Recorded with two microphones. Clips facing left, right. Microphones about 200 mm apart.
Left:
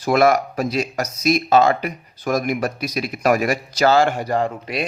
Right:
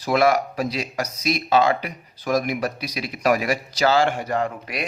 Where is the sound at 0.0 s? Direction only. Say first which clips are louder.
Left 3 dB; 45° left (ahead or behind); by 4.9 s 30° left (ahead or behind).